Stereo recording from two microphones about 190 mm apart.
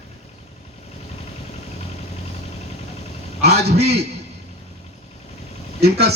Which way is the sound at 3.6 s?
60° right (ahead or behind).